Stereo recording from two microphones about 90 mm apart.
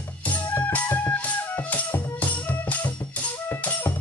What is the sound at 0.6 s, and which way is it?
Music, 25° left (ahead or behind).